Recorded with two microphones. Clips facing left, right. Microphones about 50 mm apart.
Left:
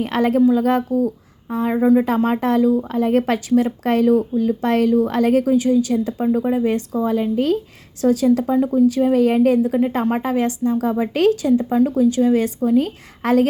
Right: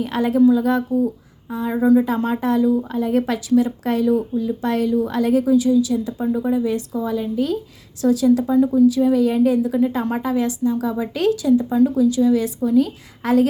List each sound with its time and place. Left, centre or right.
0.0 s a woman's voice: left
1.5 s a woman's voice: left